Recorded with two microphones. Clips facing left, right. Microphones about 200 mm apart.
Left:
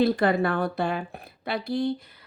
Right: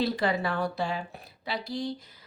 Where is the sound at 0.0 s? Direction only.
55° left (ahead or behind).